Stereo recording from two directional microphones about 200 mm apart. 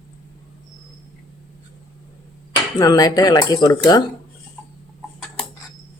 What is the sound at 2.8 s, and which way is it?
Speech, 20° left (ahead or behind).